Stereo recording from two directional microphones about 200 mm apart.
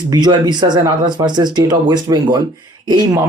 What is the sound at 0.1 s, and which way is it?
Speech, 20° right (ahead or behind).